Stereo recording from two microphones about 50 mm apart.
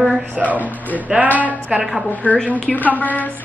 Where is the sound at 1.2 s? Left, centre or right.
Right.